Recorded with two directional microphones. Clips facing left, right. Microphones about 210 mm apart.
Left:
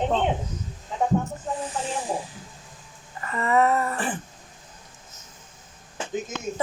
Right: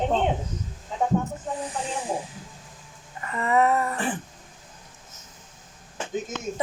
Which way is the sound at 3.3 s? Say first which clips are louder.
Even; 15° right (ahead or behind).